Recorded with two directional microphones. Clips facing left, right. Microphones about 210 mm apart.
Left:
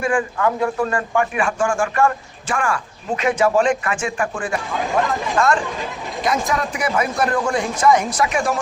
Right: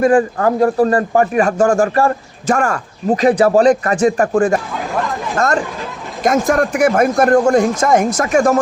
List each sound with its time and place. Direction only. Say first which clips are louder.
0.0 s a man's voice: right 7 dB; 40° right (ahead or behind)